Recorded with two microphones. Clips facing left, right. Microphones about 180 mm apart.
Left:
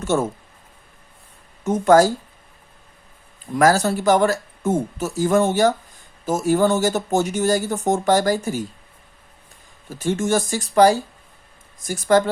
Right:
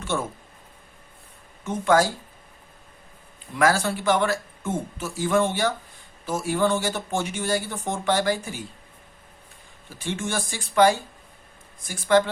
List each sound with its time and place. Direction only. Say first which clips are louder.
0.0 s speech: left 7 dB; 45° left (ahead or behind)
1.6 s speech: left 6 dB; 45° left (ahead or behind)
3.5 s speech: left 5 dB; 40° left (ahead or behind)
9.9 s speech: left 9 dB; 40° left (ahead or behind)